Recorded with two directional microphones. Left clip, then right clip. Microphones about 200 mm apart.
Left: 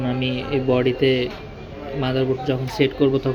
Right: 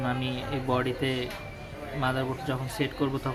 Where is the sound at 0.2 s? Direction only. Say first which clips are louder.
Left 9 dB; 15° left (ahead or behind).